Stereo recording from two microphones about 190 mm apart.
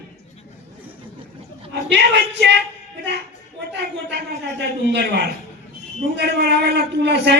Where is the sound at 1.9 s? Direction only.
65° right (ahead or behind).